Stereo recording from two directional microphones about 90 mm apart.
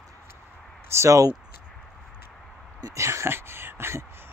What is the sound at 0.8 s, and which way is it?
Speech, 30° right (ahead or behind).